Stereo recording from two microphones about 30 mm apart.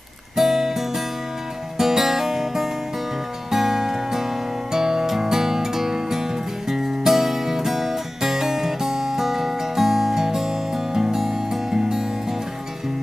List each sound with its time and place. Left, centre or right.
0.4 s music: centre